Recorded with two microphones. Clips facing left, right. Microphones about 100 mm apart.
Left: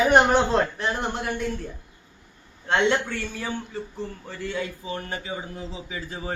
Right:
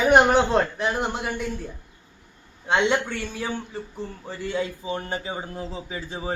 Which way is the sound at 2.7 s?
15° right (ahead or behind).